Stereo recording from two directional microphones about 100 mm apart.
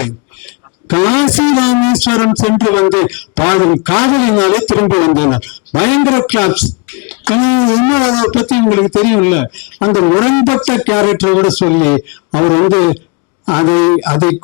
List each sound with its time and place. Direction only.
0.9 s a man's voice: 15° left (ahead or behind)